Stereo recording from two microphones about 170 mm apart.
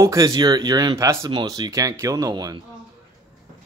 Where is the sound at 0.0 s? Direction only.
20° right (ahead or behind).